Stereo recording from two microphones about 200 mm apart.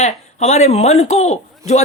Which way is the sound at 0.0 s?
35° left (ahead or behind).